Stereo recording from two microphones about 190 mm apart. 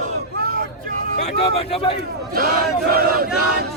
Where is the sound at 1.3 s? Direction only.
30° left (ahead or behind).